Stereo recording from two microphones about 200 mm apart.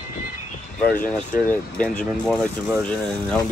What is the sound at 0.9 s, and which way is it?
Speech, 45° left (ahead or behind).